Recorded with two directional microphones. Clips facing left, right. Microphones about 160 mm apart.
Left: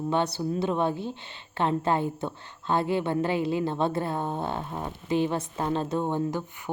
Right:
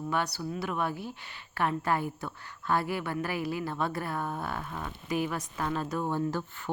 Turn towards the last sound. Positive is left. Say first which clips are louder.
# left 3 dB
turn(degrees=20)  # may be behind; listen again after turning